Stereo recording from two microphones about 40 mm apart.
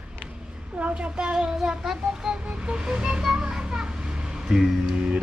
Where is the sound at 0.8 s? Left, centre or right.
Right; by 2.3 s centre.